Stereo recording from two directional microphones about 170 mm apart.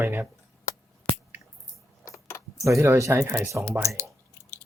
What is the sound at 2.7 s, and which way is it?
Speech, 15° right (ahead or behind).